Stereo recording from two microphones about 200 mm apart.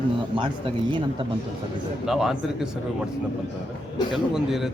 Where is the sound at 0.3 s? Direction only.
25° right (ahead or behind).